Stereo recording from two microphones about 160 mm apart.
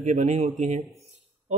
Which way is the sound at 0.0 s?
45° right (ahead or behind).